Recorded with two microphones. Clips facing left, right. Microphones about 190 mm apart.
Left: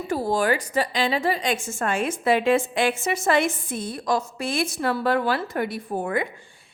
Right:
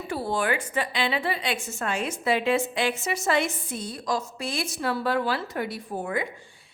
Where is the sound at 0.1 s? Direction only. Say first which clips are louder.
Left 4 dB; 45° left (ahead or behind).